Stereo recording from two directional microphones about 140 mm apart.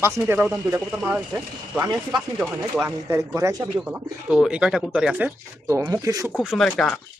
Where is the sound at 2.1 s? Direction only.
10° right (ahead or behind).